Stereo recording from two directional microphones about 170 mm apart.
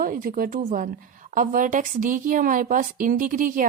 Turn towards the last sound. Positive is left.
turn(degrees=-50)  # may be behind; listen again after turning